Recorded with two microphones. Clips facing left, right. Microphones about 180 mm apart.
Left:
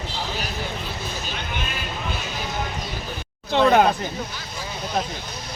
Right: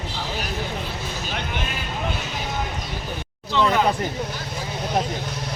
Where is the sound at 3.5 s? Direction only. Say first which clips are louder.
Left 4 dB; 55° left (ahead or behind).